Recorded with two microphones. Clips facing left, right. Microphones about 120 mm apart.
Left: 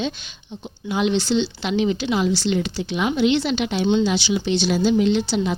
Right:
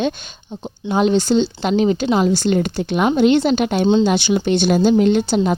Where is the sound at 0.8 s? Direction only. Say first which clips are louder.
Right 5 dB; 40° right (ahead or behind).